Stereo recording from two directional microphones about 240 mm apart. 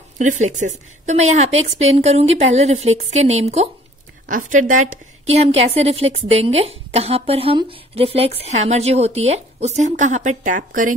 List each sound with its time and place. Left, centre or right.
0.2 s a woman's voice: right